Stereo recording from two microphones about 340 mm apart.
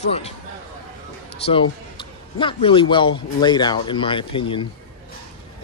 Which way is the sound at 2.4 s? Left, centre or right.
Centre.